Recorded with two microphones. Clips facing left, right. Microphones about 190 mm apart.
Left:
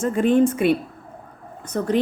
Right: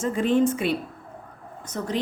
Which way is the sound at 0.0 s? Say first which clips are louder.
Left 4 dB; 55° left (ahead or behind).